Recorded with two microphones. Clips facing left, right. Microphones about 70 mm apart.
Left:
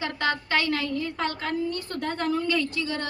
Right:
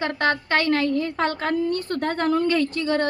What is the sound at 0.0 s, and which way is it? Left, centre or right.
A woman's voice, right.